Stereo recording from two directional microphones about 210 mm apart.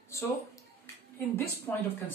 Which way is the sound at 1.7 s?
10° left (ahead or behind).